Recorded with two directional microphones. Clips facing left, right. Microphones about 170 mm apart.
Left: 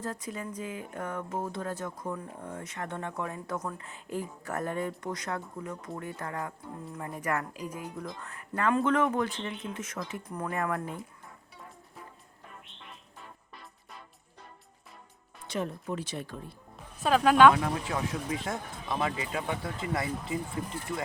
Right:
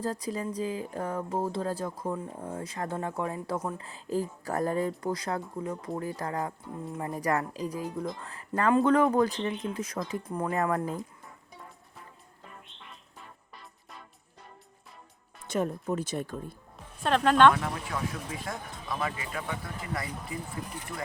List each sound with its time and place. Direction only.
0.0 s speech: 35° right (ahead or behind)
15.4 s speech: 45° right (ahead or behind)
16.7 s speech: 5° left (ahead or behind)
17.5 s speech: 20° left (ahead or behind)